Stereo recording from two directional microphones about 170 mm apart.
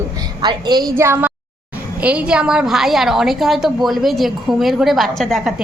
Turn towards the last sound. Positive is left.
turn(degrees=0)  # may be behind; listen again after turning